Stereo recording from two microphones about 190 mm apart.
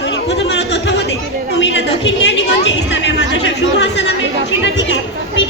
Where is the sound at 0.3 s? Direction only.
65° left (ahead or behind).